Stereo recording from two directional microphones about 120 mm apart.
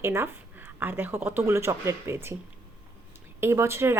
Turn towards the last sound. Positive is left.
turn(degrees=-20)  # may be behind; listen again after turning